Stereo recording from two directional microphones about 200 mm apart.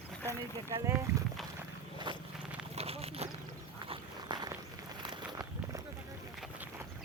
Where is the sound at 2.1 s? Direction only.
25° right (ahead or behind).